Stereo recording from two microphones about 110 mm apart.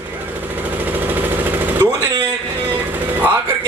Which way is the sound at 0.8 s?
15° right (ahead or behind).